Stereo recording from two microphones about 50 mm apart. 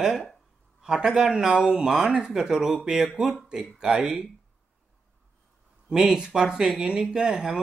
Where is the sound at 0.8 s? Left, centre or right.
Centre.